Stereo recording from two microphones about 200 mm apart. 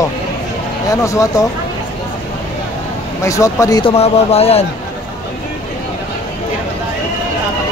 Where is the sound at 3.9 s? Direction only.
30° left (ahead or behind).